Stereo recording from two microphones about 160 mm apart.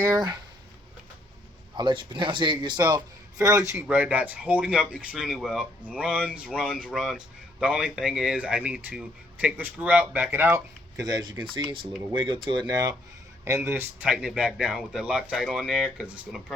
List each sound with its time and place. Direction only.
0.1 s a man's voice: 25° right (ahead or behind)
1.7 s a man's voice: 30° right (ahead or behind)
3.8 s speech: 10° right (ahead or behind)
11.0 s a man's voice: 25° right (ahead or behind)
13.4 s speech: 15° right (ahead or behind)